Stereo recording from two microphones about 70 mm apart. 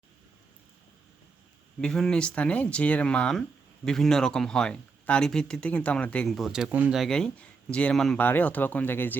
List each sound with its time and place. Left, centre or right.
1.8 s speech: centre
6.2 s speech: centre
6.7 s speech: right
7.1 s speech: centre
7.9 s speech: centre
8.2 s speech: left